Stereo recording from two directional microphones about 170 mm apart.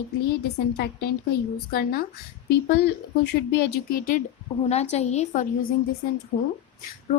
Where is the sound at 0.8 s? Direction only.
70° left (ahead or behind).